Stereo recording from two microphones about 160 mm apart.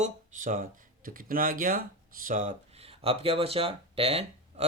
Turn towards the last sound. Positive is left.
turn(degrees=-40)  # may be behind; listen again after turning